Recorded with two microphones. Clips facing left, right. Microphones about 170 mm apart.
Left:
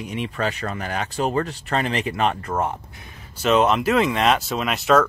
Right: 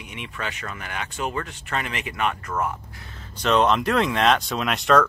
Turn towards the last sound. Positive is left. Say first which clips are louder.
# left 1 dB
turn(degrees=5)  # may be behind; listen again after turning